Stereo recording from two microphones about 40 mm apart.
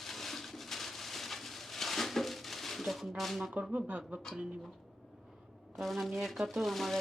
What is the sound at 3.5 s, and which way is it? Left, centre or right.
Speech, right.